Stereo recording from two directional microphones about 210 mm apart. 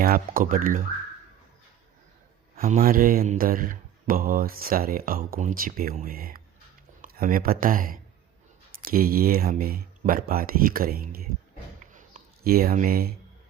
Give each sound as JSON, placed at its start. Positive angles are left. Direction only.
{"t": 0.0, "sound": "speech", "side_deg": -45}
{"t": 2.6, "sound": "speech", "side_deg": -40}
{"t": 11.9, "sound": "a sound", "side_deg": -40}